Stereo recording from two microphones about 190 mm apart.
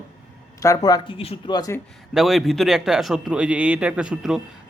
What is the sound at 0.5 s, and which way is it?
Speech, 15° left (ahead or behind).